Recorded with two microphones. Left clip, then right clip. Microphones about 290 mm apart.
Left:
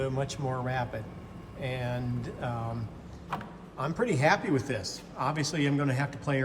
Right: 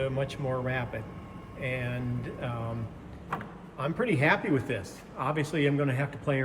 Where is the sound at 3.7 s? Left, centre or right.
Centre.